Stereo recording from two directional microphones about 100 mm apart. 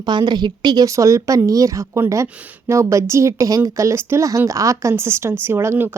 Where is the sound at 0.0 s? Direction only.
45° right (ahead or behind).